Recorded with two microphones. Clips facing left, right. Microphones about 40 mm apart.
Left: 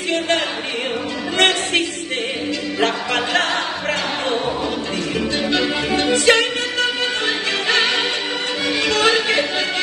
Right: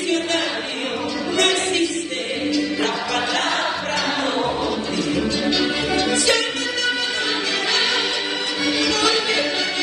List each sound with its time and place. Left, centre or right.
1.3 s a sound: left
5.4 s music: left
8.6 s music: left